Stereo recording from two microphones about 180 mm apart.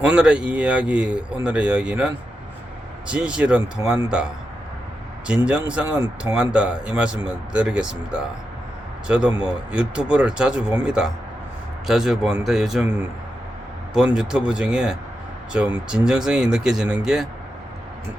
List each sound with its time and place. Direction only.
0.0 s speech: 5° right (ahead or behind)
3.1 s speech: 5° right (ahead or behind)
5.3 s speech: 5° right (ahead or behind)